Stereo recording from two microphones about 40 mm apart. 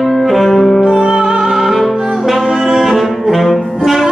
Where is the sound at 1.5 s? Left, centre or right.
Centre.